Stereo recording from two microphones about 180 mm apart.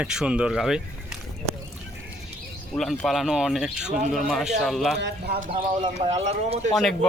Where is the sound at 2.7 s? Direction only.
Centre (ahead or behind).